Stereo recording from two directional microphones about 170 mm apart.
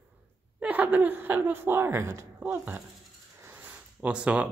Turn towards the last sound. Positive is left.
turn(degrees=-5)  # may be behind; listen again after turning